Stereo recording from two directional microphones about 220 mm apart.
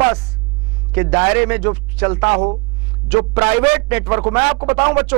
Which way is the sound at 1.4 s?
10° right (ahead or behind).